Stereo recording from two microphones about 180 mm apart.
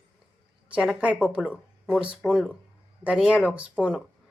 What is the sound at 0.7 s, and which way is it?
A woman's voice, 5° right (ahead or behind).